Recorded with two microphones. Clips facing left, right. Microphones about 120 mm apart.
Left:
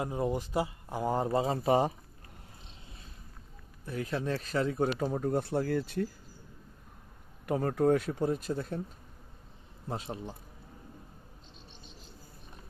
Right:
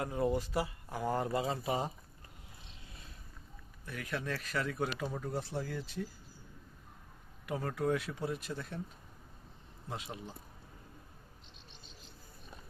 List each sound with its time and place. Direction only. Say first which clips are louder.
0.0 s speech: left 1 dB; 20° left (ahead or behind)
1.6 s speech: left 9 dB; 55° left (ahead or behind)
3.8 s speech: left 6 dB; 30° left (ahead or behind); by 6.1 s 60° left (ahead or behind)
7.4 s speech: left 7 dB; 45° left (ahead or behind)
9.9 s speech: left 6 dB; 35° left (ahead or behind)